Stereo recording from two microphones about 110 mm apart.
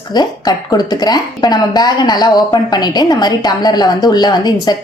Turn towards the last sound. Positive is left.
turn(degrees=40)  # may be behind; listen again after turning